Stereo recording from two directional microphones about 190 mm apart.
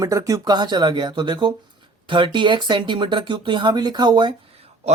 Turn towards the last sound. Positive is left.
turn(degrees=-30)  # may be behind; listen again after turning